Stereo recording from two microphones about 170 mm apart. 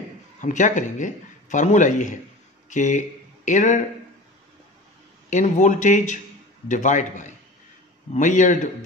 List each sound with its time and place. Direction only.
0.4 s speech: 50° left (ahead or behind)
5.3 s speech: 45° left (ahead or behind)